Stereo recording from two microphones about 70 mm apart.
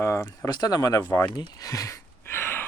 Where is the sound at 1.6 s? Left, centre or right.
Left.